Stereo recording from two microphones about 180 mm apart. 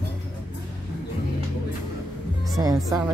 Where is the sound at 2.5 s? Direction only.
20° right (ahead or behind).